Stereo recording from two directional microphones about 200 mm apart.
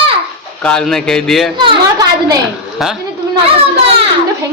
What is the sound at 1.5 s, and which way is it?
Speech, 20° right (ahead or behind).